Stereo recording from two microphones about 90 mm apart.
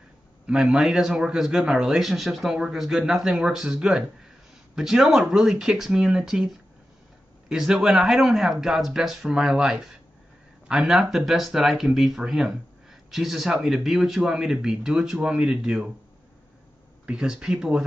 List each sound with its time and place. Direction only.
0.5 s a man's voice: 5° right (ahead or behind)
17.0 s speech: 10° right (ahead or behind)